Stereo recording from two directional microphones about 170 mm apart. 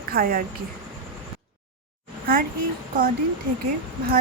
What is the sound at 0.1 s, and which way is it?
Speech, 60° right (ahead or behind).